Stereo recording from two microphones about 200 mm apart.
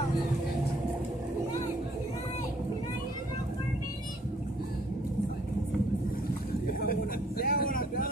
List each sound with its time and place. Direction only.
6.9 s vehicle: 50° left (ahead or behind)